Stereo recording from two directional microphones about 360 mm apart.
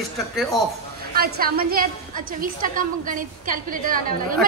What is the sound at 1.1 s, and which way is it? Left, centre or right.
A woman's voice, right.